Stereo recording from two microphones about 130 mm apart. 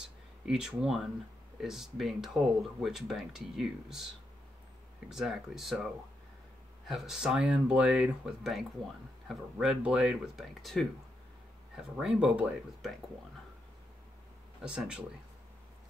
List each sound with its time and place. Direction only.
0.5 s speech: 5° right (ahead or behind)
5.1 s speech: centre (ahead or behind)
6.9 s speech: centre (ahead or behind)
14.6 s speech: 5° right (ahead or behind)